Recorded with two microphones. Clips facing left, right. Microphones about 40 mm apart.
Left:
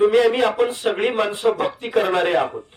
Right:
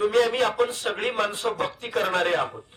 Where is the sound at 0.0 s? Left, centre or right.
Centre.